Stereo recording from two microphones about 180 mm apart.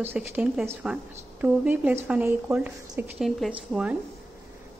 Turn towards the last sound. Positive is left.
turn(degrees=-5)  # may be behind; listen again after turning